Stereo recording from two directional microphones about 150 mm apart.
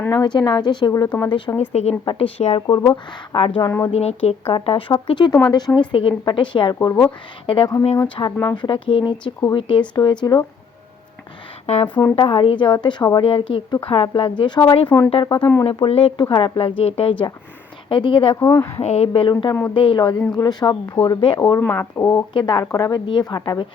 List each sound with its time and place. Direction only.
0.1 s speech: 30° left (ahead or behind)
1.7 s speech: 45° left (ahead or behind)
2.6 s speech: 25° left (ahead or behind)
3.6 s speech: 20° left (ahead or behind)
3.9 s speech: 45° left (ahead or behind)
6.7 s speech: 20° left (ahead or behind)
7.4 s speech: 35° left (ahead or behind)
11.6 s speech: 45° left (ahead or behind)
14.8 s speech: 15° left (ahead or behind)
15.1 s speech: 30° left (ahead or behind)
18.3 s speech: 15° left (ahead or behind)
18.8 s speech: 45° left (ahead or behind); by 21.6 s 30° left (ahead or behind)
21.6 s speech: 15° left (ahead or behind)
22.3 s speech: 30° left (ahead or behind)